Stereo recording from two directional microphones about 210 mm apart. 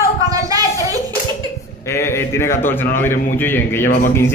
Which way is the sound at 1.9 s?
10° left (ahead or behind).